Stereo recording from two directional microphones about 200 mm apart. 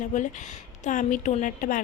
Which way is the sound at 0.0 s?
35° left (ahead or behind).